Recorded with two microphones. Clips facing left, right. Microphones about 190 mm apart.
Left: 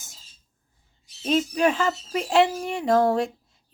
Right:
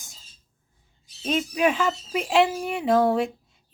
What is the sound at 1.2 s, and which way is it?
Speech, 5° right (ahead or behind).